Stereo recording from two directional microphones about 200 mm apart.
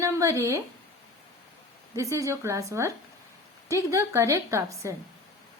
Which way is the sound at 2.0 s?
15° right (ahead or behind).